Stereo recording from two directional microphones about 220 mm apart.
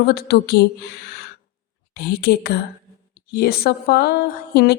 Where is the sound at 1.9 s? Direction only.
45° left (ahead or behind).